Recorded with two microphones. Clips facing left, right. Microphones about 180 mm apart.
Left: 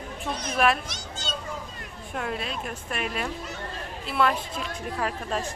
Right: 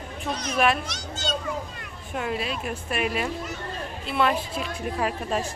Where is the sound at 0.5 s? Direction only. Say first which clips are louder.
Right 1 dB; centre (ahead or behind).